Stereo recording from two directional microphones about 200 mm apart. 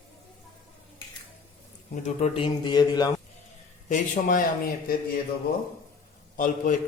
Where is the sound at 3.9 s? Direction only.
40° left (ahead or behind).